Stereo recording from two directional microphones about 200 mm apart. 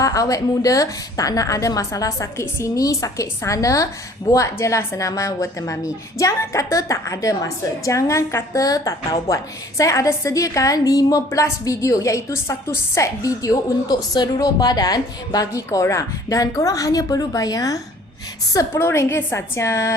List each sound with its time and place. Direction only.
0.0 s a woman's voice: 15° left (ahead or behind)